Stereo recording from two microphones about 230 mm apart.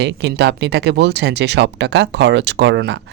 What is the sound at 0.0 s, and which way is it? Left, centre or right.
Speech, right.